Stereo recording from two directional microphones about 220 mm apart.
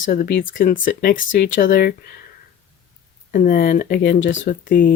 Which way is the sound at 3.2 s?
40° left (ahead or behind).